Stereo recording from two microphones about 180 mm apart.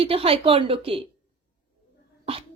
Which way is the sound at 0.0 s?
30° right (ahead or behind).